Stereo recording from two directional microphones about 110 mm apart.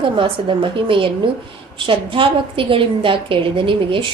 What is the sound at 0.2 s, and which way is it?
A woman's voice, 50° right (ahead or behind).